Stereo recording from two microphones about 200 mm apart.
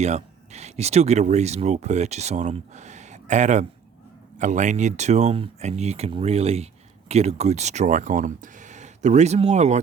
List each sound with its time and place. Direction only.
0.0 s speech: 35° right (ahead or behind)